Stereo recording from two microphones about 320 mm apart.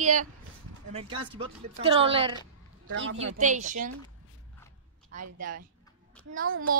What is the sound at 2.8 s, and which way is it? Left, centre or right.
Speech, right.